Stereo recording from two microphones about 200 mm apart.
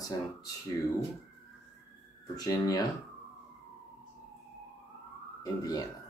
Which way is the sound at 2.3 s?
20° left (ahead or behind).